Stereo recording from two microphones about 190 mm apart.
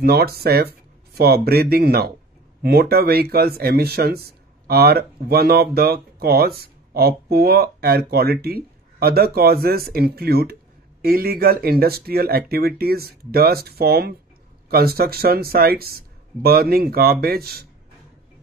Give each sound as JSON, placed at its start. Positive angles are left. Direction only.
{"t": 0.0, "sound": "speech", "side_deg": -55}